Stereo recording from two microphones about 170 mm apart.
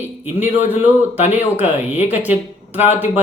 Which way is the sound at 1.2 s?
40° left (ahead or behind).